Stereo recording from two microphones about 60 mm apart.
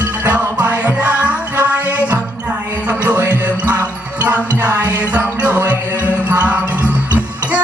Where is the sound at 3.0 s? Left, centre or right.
Right.